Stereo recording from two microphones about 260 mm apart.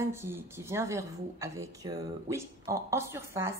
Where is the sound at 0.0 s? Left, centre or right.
Centre.